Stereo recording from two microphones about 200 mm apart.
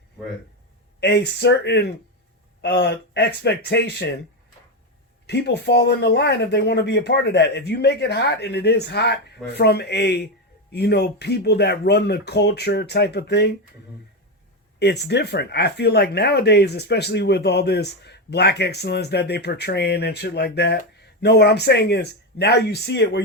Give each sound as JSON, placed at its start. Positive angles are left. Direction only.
{"t": 0.9, "sound": "speech", "side_deg": 55}
{"t": 5.2, "sound": "speech", "side_deg": 55}
{"t": 14.8, "sound": "speech", "side_deg": 55}